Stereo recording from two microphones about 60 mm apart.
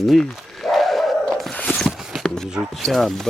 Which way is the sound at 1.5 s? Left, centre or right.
Centre.